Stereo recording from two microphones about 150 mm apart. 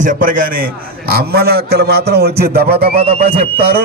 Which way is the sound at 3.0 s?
40° right (ahead or behind).